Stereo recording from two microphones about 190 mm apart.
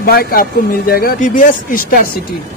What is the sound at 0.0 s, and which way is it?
A man's voice, 50° left (ahead or behind).